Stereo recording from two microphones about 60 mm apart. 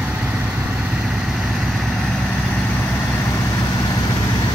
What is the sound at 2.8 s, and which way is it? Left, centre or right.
Vehicle, left.